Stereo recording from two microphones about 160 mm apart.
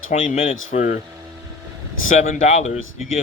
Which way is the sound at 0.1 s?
50° left (ahead or behind).